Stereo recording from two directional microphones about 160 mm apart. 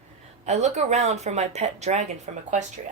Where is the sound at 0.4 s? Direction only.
45° right (ahead or behind).